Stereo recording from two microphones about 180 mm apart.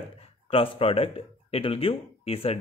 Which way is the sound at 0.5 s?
30° left (ahead or behind).